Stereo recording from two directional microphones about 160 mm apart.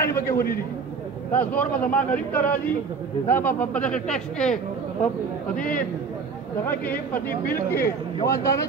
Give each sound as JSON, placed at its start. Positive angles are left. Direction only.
{"t": 0.0, "sound": "a sound", "side_deg": 15}
{"t": 1.3, "sound": "speech", "side_deg": 10}
{"t": 5.6, "sound": "a man's voice", "side_deg": 60}
{"t": 6.6, "sound": "speech", "side_deg": 10}